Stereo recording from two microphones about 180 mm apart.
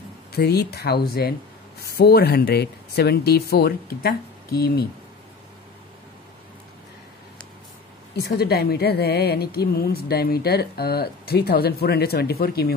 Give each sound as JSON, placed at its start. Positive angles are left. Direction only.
{"t": 0.4, "sound": "a woman's voice", "side_deg": 60}
{"t": 8.2, "sound": "a woman's voice", "side_deg": 60}